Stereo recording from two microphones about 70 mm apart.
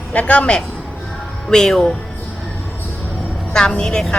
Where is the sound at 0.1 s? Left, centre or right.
Centre.